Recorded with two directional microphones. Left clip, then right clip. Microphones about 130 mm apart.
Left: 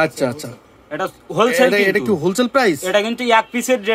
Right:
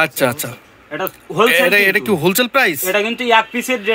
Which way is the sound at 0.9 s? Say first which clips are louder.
Even; 30° left (ahead or behind).